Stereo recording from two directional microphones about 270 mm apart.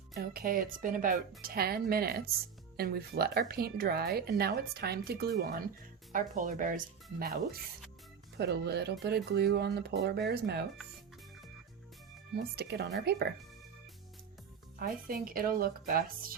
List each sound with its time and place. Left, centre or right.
0.1 s speech: right
12.3 s speech: right
14.8 s speech: right